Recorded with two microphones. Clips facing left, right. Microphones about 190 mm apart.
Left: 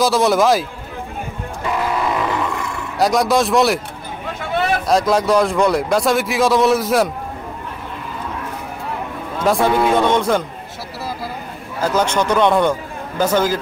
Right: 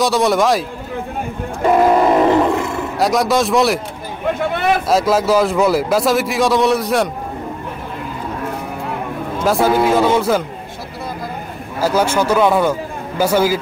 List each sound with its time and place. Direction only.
0.0 s a man's voice: centre (ahead or behind)
1.6 s grunt: 45° right (ahead or behind)
3.0 s a man's voice: centre (ahead or behind)
4.8 s a man's voice: 5° right (ahead or behind)
9.4 s a man's voice: centre (ahead or behind)
11.8 s a man's voice: 10° right (ahead or behind)